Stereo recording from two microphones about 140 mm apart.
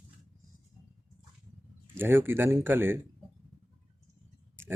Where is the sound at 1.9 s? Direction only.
15° right (ahead or behind).